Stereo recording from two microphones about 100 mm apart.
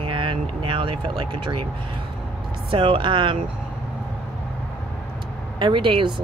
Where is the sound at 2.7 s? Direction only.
65° right (ahead or behind).